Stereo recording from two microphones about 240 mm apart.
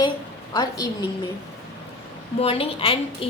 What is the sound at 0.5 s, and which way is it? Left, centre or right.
Speech, centre.